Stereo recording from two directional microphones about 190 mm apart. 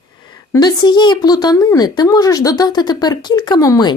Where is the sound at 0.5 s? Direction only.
20° left (ahead or behind).